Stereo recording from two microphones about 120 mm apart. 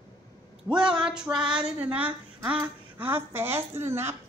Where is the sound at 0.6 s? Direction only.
5° right (ahead or behind).